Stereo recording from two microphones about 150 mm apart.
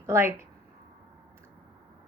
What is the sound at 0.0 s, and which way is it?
Speech, 15° right (ahead or behind).